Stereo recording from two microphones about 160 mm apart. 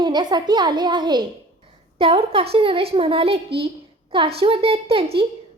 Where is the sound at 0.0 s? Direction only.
25° right (ahead or behind).